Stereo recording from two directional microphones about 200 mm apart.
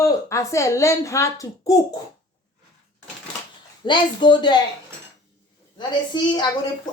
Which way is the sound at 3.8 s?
25° left (ahead or behind).